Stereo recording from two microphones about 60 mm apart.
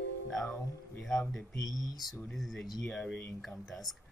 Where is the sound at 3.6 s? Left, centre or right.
Centre.